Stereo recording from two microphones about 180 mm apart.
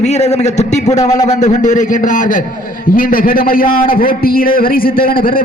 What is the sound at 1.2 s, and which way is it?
A man's voice, 40° left (ahead or behind).